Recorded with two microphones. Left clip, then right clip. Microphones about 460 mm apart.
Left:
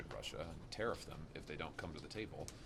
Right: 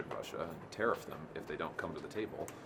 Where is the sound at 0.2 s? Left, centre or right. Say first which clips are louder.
Right 6 dB; left.